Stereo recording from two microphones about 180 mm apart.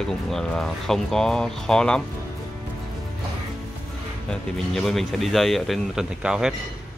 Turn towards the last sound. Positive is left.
turn(degrees=-5)  # may be behind; listen again after turning